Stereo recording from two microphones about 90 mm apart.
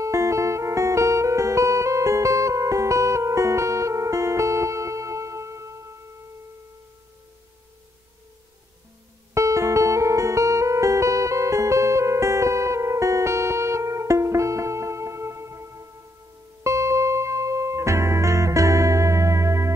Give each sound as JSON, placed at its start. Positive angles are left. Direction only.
{"t": 0.0, "sound": "music", "side_deg": -35}
{"t": 9.3, "sound": "music", "side_deg": -35}